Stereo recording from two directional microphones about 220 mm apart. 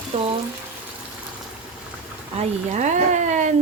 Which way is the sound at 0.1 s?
30° right (ahead or behind).